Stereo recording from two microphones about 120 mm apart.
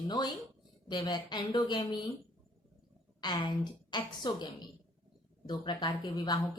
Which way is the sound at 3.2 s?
40° left (ahead or behind).